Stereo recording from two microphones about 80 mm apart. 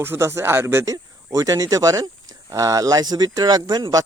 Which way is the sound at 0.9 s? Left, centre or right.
Right.